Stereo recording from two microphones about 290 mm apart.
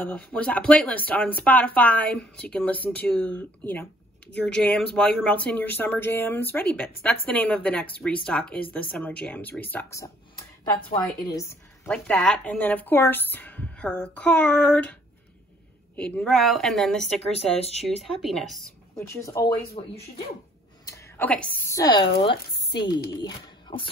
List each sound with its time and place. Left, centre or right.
0.0 s a woman's voice: centre
16.0 s speech: centre
17.4 s speech: left
18.0 s speech: centre
20.8 s a sound: centre
21.6 s a woman's voice: centre
23.2 s speech: centre